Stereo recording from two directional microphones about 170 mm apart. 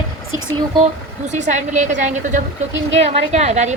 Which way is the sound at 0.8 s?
45° right (ahead or behind).